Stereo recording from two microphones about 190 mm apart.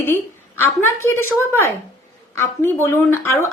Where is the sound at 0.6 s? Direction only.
10° left (ahead or behind).